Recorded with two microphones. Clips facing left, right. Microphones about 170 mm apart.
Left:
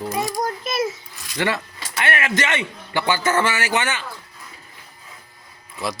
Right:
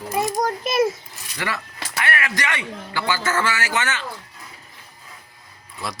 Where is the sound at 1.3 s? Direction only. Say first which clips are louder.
Left 5 dB; 25° left (ahead or behind).